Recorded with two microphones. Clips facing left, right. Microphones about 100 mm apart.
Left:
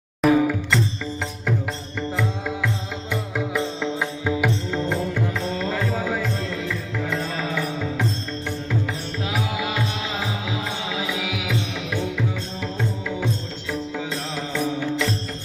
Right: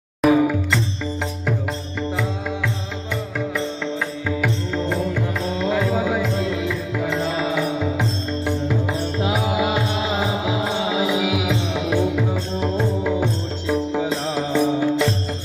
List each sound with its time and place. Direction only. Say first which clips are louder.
0.2 s music: right 2 dB; 5° right (ahead or behind)
4.4 s music: right 1 dB; 5° left (ahead or behind)
5.5 s music: right 8 dB; 10° right (ahead or behind)
9.2 s music: right 5 dB; 25° right (ahead or behind)